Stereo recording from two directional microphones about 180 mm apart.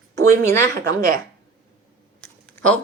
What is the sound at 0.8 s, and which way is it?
Speech, 50° right (ahead or behind).